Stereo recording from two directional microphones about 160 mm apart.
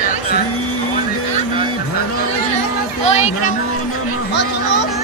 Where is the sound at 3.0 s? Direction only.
45° left (ahead or behind).